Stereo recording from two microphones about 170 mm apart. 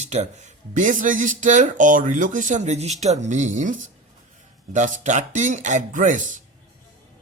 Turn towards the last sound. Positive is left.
turn(degrees=-50)  # may be behind; listen again after turning